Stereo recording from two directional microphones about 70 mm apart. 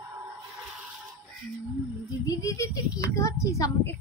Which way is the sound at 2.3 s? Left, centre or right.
Left.